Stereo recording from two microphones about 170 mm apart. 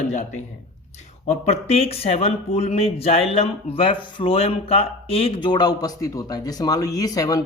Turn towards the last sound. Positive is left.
turn(degrees=20)  # may be behind; listen again after turning